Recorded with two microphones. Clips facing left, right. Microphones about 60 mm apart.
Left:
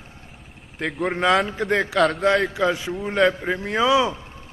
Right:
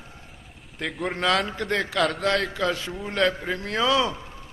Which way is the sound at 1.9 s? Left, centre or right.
Centre.